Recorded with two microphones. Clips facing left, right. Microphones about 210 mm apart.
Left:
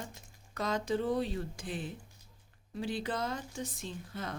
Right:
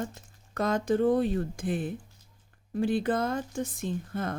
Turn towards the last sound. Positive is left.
turn(degrees=-50)  # may be behind; listen again after turning